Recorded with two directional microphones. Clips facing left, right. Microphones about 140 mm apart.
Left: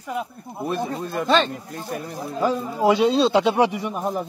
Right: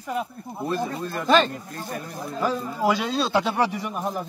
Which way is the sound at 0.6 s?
15° left (ahead or behind).